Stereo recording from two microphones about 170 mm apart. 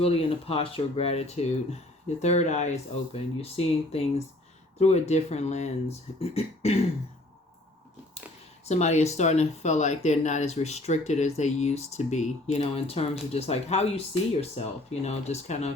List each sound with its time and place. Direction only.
0.0 s speech: 35° left (ahead or behind)
8.6 s speech: 40° left (ahead or behind)